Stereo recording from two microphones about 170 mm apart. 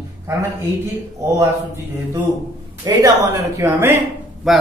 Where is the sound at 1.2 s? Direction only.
15° right (ahead or behind).